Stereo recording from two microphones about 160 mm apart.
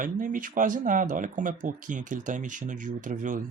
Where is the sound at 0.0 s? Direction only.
60° right (ahead or behind).